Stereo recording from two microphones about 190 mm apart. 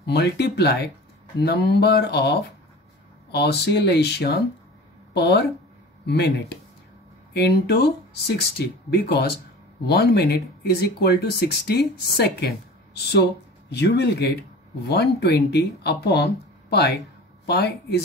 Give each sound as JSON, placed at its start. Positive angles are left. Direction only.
{"t": 0.0, "sound": "speech", "side_deg": 60}